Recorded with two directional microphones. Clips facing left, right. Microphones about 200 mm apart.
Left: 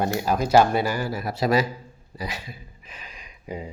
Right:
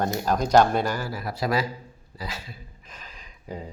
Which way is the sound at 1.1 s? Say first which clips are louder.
Left 4 dB; 20° left (ahead or behind).